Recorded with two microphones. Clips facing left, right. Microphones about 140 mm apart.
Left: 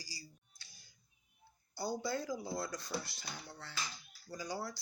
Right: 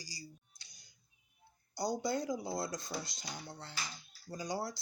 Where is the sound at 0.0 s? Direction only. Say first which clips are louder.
Right 3 dB; 20° right (ahead or behind).